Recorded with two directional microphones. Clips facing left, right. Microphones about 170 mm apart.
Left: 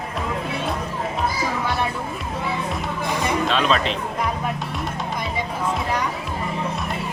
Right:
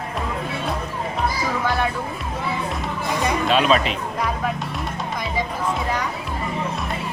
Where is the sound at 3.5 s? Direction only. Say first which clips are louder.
Right 5 dB; 10° right (ahead or behind).